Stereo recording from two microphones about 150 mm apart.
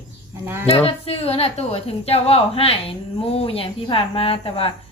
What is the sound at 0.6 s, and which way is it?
A woman's voice, 40° left (ahead or behind).